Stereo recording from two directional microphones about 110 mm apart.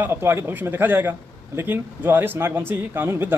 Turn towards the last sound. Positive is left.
turn(degrees=-20)  # may be behind; listen again after turning